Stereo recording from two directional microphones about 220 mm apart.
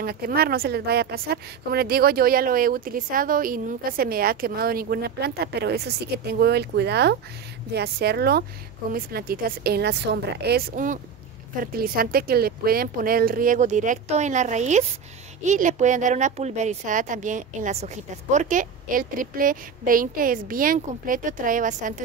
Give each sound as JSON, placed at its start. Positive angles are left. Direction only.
{"t": 0.0, "sound": "speech", "side_deg": -45}